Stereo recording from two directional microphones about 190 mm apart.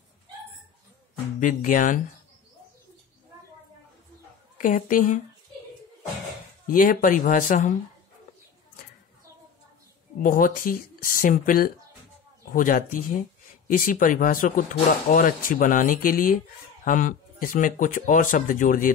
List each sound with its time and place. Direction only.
1.4 s speech: 45° left (ahead or behind)
4.6 s speech: 45° left (ahead or behind)
6.7 s speech: 45° left (ahead or behind)
10.2 s speech: 45° left (ahead or behind)